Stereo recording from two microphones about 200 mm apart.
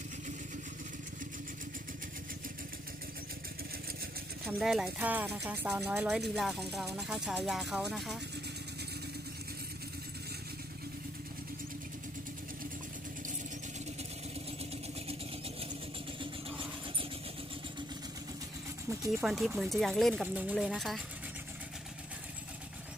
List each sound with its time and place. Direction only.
4.4 s speech: centre (ahead or behind)
14.6 s vehicle: 30° right (ahead or behind)
16.6 s vehicle: 25° right (ahead or behind)
18.9 s a sound: 15° right (ahead or behind)
19.2 s speech: centre (ahead or behind)